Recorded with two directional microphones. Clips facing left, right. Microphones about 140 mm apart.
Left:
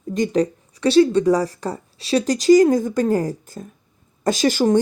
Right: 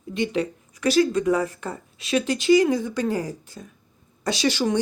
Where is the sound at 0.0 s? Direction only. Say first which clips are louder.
Left 5 dB; 40° left (ahead or behind).